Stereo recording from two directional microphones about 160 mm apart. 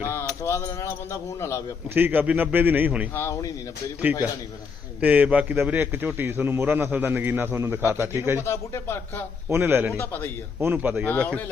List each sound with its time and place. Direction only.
0.1 s keys jangling: 15° left (ahead or behind)
1.9 s a man's voice: 10° right (ahead or behind)
3.2 s keys jangling: 15° left (ahead or behind)
4.9 s a man's voice: 10° right (ahead or behind)
8.4 s keys jangling: 15° left (ahead or behind)
9.5 s a man's voice: 15° right (ahead or behind)
10.0 s keys jangling: 15° left (ahead or behind)
10.6 s a man's voice: 15° right (ahead or behind)
11.0 s keys jangling: 5° left (ahead or behind)